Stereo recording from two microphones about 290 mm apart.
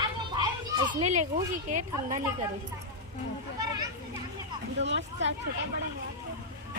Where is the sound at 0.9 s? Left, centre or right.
Right.